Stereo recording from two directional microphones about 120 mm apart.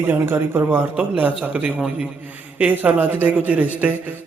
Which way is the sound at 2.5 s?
10° right (ahead or behind).